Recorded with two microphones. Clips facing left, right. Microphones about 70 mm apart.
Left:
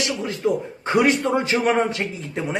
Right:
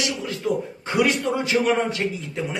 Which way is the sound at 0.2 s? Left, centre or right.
Left.